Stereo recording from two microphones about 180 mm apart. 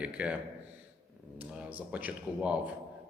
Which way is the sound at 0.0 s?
5° right (ahead or behind).